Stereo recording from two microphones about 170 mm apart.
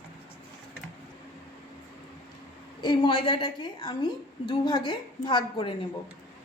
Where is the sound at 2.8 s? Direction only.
25° left (ahead or behind).